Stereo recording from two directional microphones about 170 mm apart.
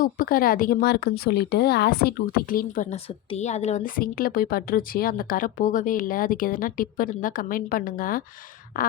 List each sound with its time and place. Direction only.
0.0 s a woman's voice: 55° left (ahead or behind)
2.9 s a woman's voice: 40° left (ahead or behind)